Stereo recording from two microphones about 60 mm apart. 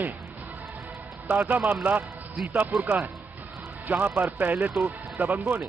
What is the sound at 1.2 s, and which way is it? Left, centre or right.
A man's voice, right.